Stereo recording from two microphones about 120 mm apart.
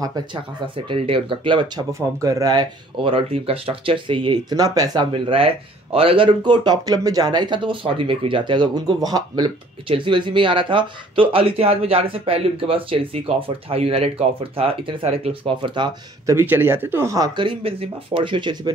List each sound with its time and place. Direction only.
0.0 s speech: 30° right (ahead or behind)
0.8 s speech: 50° right (ahead or behind)
1.9 s speech: 25° right (ahead or behind)
3.0 s speech: 45° right (ahead or behind)
9.8 s speech: 45° right (ahead or behind)
16.3 s speech: 20° right (ahead or behind)
17.4 s speech: 50° right (ahead or behind)